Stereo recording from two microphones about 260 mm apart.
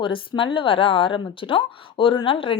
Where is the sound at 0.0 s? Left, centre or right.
Centre.